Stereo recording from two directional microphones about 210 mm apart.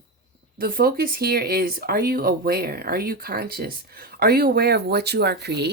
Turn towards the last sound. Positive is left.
turn(degrees=-50)  # may be behind; listen again after turning